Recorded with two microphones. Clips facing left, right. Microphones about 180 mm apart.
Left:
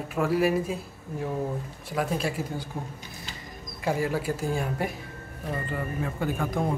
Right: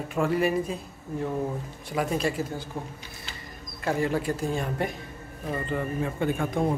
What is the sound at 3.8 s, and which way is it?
Speech, 5° left (ahead or behind).